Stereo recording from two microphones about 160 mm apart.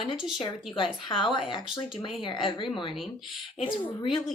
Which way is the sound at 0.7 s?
30° left (ahead or behind).